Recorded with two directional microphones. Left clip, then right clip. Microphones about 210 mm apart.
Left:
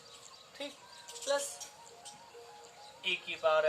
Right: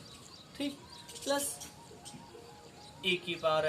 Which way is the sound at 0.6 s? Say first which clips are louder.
Right 5 dB; 15° right (ahead or behind).